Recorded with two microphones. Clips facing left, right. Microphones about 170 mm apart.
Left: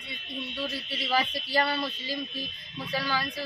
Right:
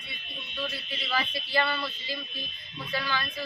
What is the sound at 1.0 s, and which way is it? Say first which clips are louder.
Speech: left 4 dB; 40° left (ahead or behind).